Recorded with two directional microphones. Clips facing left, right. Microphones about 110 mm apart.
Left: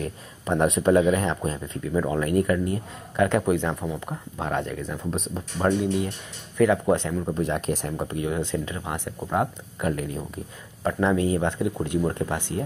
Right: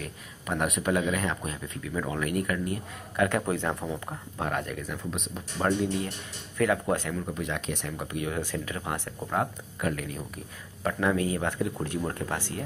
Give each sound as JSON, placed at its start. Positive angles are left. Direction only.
{"t": 0.0, "sound": "speech", "side_deg": 30}
{"t": 5.1, "sound": "speech", "side_deg": 35}
{"t": 5.6, "sound": "speech", "side_deg": 20}
{"t": 7.3, "sound": "speech", "side_deg": 35}
{"t": 8.0, "sound": "speech", "side_deg": 30}